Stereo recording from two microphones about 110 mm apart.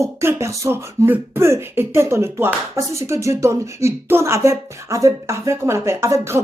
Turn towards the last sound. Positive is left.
turn(degrees=-25)  # may be behind; listen again after turning